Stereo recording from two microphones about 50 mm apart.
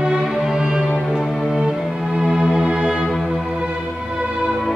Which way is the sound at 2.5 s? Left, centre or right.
Centre.